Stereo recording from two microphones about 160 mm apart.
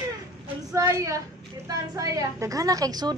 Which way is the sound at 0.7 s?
20° right (ahead or behind).